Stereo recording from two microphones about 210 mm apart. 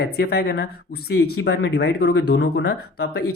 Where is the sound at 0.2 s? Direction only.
50° left (ahead or behind).